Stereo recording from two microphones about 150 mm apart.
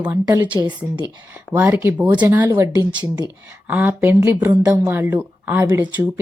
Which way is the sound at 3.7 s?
10° right (ahead or behind).